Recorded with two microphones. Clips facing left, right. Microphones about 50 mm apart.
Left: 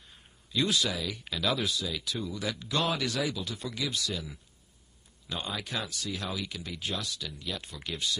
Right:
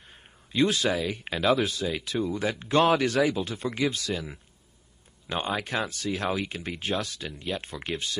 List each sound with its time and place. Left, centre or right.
0.0 s speech: right